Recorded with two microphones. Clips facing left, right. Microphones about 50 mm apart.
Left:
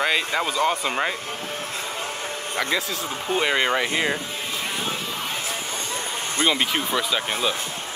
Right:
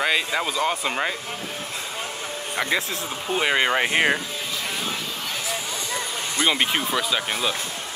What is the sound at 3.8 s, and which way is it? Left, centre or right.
Speech, right.